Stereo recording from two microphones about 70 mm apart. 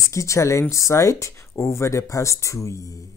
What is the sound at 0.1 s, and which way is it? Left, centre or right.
A woman's voice, left.